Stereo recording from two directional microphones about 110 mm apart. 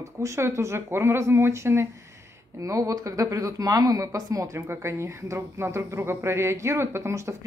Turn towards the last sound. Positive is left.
turn(degrees=-25)  # may be behind; listen again after turning